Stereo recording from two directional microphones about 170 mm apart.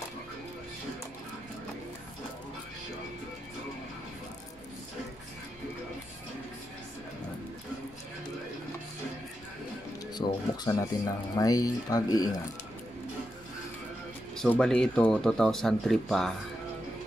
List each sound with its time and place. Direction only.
10.2 s speech: 30° left (ahead or behind)
14.3 s speech: 5° left (ahead or behind)